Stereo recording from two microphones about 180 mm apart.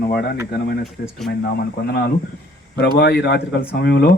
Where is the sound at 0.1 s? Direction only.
60° left (ahead or behind).